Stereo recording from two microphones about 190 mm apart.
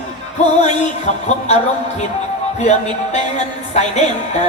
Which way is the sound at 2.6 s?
35° left (ahead or behind).